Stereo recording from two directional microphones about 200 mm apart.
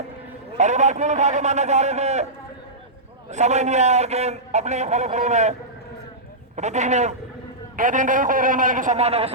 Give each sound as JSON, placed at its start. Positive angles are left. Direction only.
{"t": 0.5, "sound": "a man's voice", "side_deg": -35}
{"t": 3.2, "sound": "a man's voice", "side_deg": -35}
{"t": 6.6, "sound": "a man's voice", "side_deg": -35}